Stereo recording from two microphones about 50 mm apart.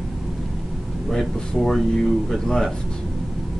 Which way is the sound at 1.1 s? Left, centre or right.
Centre.